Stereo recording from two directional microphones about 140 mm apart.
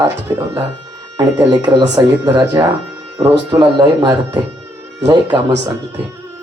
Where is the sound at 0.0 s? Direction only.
20° right (ahead or behind).